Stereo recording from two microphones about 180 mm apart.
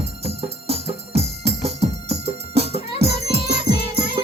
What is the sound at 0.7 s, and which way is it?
Music, 30° right (ahead or behind).